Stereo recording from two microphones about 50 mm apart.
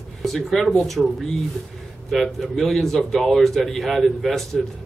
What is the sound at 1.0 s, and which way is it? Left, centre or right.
Speech, centre.